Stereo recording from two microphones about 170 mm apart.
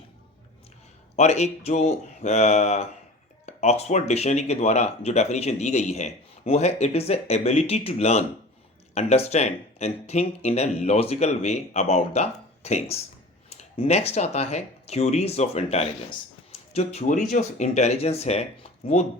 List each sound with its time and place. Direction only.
1.1 s speech: 40° left (ahead or behind)